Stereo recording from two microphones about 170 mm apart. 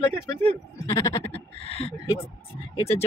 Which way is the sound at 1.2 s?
35° left (ahead or behind).